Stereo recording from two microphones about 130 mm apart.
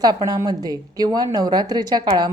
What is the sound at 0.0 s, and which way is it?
Speech, 30° right (ahead or behind).